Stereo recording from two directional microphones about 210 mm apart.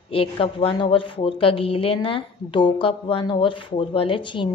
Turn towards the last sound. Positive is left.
turn(degrees=25)  # may be behind; listen again after turning